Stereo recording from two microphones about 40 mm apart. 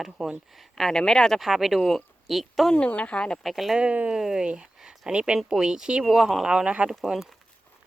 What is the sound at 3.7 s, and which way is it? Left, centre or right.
Speech, right.